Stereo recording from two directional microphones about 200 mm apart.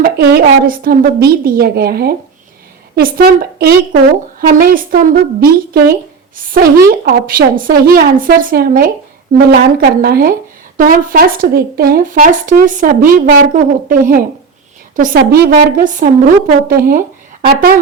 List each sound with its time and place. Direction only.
0.0 s a woman's voice: 50° right (ahead or behind)